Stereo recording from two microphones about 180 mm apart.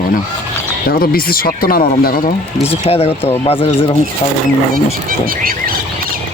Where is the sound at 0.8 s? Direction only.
55° left (ahead or behind).